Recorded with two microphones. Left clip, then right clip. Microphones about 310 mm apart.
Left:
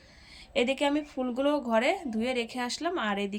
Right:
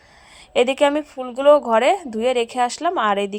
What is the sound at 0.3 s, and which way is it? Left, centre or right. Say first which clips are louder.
A woman's voice: right 11 dB; centre.